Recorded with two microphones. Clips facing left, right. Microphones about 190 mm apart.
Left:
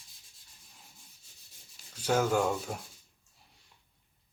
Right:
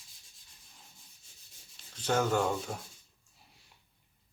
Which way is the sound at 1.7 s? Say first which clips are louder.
Left 1 dB; 10° left (ahead or behind).